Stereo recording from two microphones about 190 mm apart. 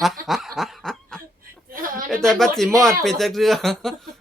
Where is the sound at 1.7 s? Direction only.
45° right (ahead or behind).